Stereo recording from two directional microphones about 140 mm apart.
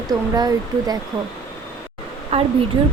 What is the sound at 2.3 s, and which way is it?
Speech, 45° right (ahead or behind).